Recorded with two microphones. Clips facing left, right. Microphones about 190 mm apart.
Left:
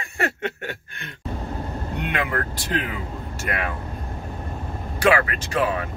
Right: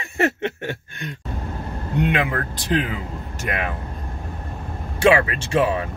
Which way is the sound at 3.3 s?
20° right (ahead or behind).